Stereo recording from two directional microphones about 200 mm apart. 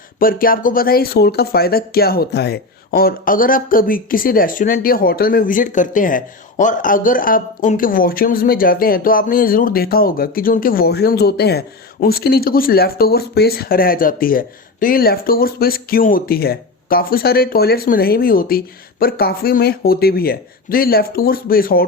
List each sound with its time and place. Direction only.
0.2 s speech: 45° left (ahead or behind)